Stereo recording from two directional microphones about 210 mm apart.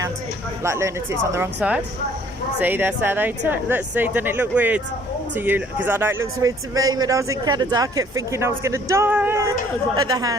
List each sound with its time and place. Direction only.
0.6 s speech: 15° right (ahead or behind)